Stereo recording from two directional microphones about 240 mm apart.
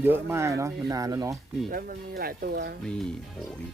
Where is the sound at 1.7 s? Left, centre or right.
Right.